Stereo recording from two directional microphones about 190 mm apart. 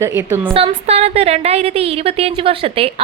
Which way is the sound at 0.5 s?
30° right (ahead or behind).